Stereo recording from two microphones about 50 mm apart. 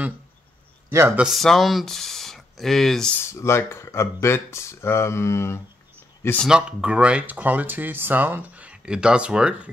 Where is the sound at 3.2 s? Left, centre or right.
Left.